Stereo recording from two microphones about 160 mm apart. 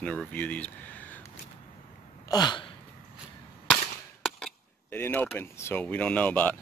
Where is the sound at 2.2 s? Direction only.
25° left (ahead or behind).